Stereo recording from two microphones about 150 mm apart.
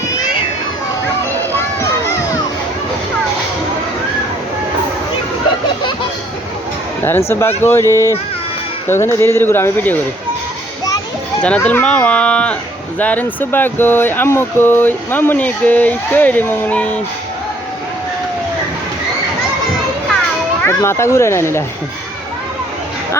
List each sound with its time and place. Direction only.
1.5 s children playing: 15° left (ahead or behind)
7.3 s speech: 15° left (ahead or behind)
11.4 s speech: 10° left (ahead or behind)
20.7 s speech: 15° left (ahead or behind)